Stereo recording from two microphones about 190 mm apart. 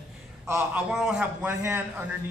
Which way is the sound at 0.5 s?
10° right (ahead or behind).